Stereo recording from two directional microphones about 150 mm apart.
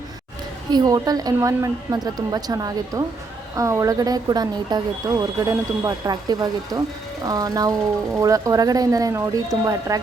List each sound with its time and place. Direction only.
0.7 s speech: 25° right (ahead or behind)